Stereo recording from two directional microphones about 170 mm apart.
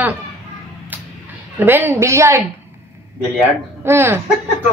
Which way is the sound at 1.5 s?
10° right (ahead or behind).